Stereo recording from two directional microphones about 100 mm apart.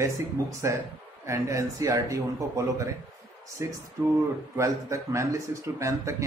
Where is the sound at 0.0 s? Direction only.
30° right (ahead or behind).